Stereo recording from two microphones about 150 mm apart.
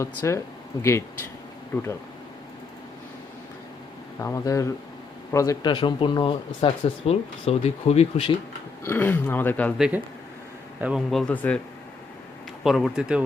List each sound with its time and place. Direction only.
0.0 s speech: 20° left (ahead or behind)
4.2 s speech: 20° left (ahead or behind)
5.6 s speech: 35° left (ahead or behind)
8.8 s speech: 15° left (ahead or behind)
9.7 s a man's voice: 5° right (ahead or behind)
11.1 s speech: 5° left (ahead or behind)
12.6 s speech: centre (ahead or behind)